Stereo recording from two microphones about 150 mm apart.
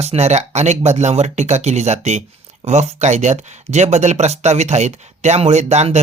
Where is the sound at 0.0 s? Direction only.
45° right (ahead or behind).